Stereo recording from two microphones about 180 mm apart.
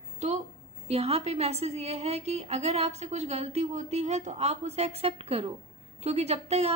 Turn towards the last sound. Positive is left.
turn(degrees=-35)  # may be behind; listen again after turning